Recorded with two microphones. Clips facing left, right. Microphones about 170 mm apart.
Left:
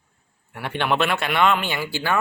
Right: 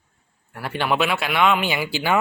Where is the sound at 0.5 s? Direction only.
5° right (ahead or behind).